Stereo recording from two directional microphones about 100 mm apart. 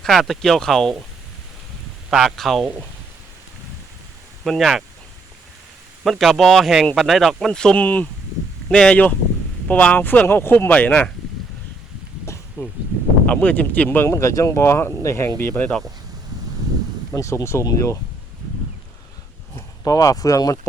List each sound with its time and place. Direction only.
0.0 s speech: centre (ahead or behind)
2.0 s speech: centre (ahead or behind)
4.4 s speech: centre (ahead or behind)
6.1 s speech: centre (ahead or behind)
12.6 s speech: 30° left (ahead or behind)
13.2 s speech: 15° left (ahead or behind)
14.1 s speech: 30° left (ahead or behind)
17.2 s speech: 30° left (ahead or behind)
19.8 s speech: 35° left (ahead or behind)